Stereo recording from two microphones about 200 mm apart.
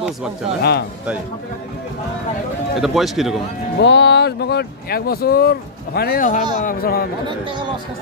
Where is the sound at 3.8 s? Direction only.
60° left (ahead or behind).